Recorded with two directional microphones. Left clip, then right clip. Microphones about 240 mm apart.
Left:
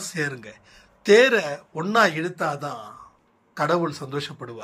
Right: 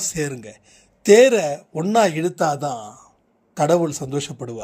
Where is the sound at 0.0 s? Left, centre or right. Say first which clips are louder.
Right 2 dB; right.